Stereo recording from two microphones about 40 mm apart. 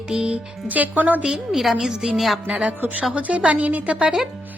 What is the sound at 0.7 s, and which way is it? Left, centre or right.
Speech, right.